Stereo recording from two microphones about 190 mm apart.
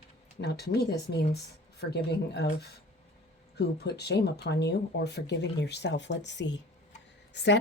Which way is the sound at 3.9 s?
60° left (ahead or behind).